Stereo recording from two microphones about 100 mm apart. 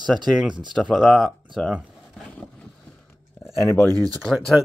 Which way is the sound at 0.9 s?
Centre (ahead or behind).